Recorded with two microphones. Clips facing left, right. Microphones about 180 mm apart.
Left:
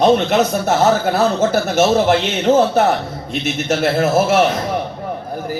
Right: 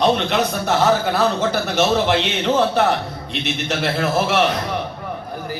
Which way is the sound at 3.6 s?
45° left (ahead or behind).